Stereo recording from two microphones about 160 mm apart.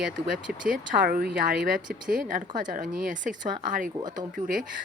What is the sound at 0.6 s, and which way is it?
Speech, 65° right (ahead or behind).